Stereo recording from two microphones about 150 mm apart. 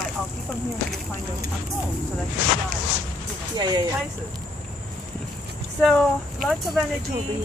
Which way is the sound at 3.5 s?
30° right (ahead or behind).